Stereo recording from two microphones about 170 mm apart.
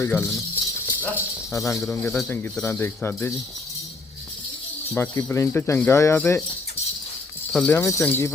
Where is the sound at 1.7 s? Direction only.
10° left (ahead or behind).